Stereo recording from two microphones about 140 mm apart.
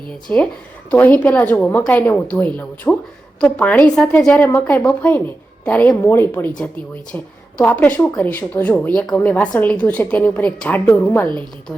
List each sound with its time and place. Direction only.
0.3 s a woman's voice: 10° left (ahead or behind)
7.6 s a woman's voice: 10° left (ahead or behind)